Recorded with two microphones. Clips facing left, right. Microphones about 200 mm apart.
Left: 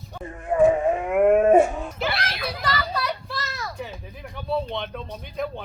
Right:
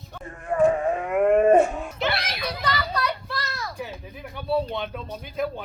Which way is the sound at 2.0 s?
Centre (ahead or behind).